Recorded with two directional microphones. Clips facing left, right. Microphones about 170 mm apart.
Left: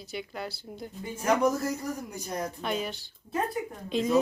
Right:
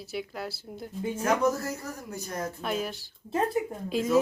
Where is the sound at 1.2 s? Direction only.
15° left (ahead or behind).